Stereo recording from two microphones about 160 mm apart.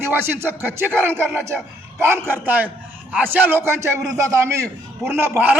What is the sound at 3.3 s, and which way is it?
Speech, 10° right (ahead or behind).